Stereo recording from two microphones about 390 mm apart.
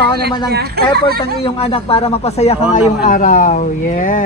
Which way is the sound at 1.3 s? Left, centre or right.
Centre.